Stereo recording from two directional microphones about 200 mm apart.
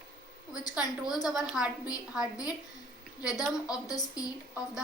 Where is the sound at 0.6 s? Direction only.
20° left (ahead or behind).